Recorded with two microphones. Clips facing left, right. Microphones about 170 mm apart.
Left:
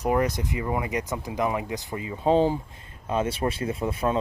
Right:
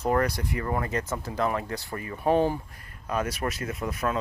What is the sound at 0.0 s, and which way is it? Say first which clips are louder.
Speech: left 1 dB; 15° left (ahead or behind).